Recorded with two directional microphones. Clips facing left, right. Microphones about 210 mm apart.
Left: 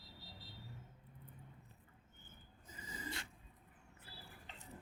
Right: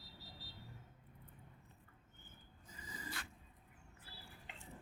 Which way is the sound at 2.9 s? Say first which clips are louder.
Left 2 dB; 25° left (ahead or behind).